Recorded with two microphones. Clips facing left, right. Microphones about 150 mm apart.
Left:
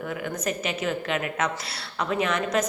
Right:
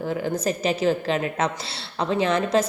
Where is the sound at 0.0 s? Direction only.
30° right (ahead or behind).